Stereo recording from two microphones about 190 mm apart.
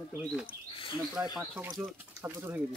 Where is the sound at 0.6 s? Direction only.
30° left (ahead or behind).